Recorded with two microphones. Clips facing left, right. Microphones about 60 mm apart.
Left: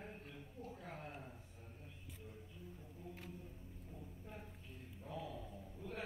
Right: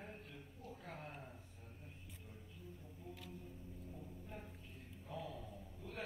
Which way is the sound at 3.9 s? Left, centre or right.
Centre.